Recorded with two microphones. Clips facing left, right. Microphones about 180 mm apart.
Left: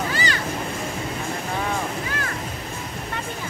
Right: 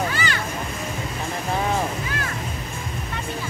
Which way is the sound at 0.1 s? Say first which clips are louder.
Left 1 dB; 35° left (ahead or behind).